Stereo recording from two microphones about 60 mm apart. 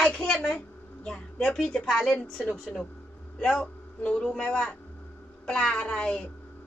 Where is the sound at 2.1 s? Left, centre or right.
Left.